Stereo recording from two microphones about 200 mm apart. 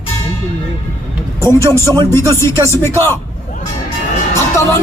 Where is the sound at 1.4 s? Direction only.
15° left (ahead or behind).